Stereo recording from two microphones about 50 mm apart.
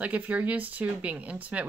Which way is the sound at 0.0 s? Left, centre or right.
Right.